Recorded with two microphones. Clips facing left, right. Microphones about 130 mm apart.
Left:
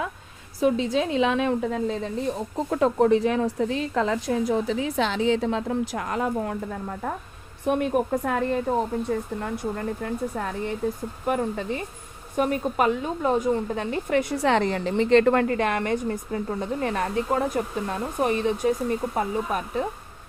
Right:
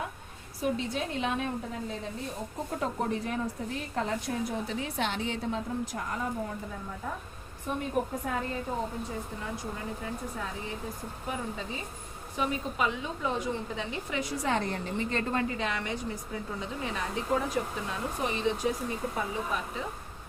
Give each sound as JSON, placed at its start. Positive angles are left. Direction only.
{"t": 0.6, "sound": "a woman's voice", "side_deg": 90}